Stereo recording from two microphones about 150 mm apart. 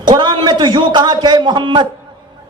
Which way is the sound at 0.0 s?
30° right (ahead or behind).